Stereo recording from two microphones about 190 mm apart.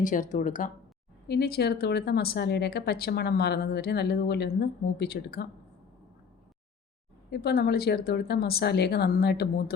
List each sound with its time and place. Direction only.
0.0 s speech: 45° left (ahead or behind)
1.3 s speech: 55° left (ahead or behind)
7.3 s speech: 55° left (ahead or behind)